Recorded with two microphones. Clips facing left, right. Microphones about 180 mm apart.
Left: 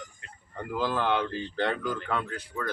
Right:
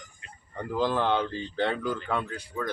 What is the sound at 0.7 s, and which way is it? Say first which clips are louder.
A man's voice: right 2 dB; 20° right (ahead or behind).